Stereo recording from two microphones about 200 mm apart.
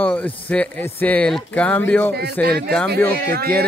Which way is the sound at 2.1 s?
50° right (ahead or behind).